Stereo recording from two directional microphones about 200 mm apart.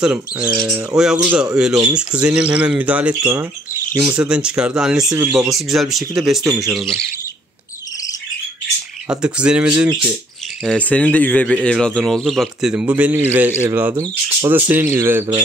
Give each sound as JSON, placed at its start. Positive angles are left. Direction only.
{"t": 0.0, "sound": "speech", "side_deg": -5}
{"t": 6.4, "sound": "speech", "side_deg": -15}
{"t": 6.7, "sound": "speech", "side_deg": 0}
{"t": 9.2, "sound": "speech", "side_deg": -5}
{"t": 10.6, "sound": "speech", "side_deg": 5}